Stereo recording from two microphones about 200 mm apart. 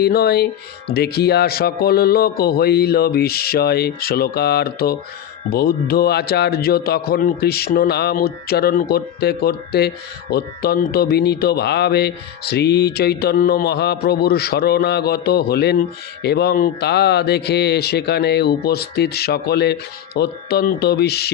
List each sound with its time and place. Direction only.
0.0 s speech: 50° left (ahead or behind)